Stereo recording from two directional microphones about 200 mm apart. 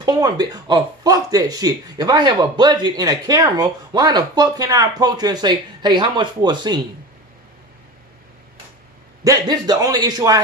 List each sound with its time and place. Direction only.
0.0 s speech: 20° right (ahead or behind)
9.2 s speech: 20° right (ahead or behind)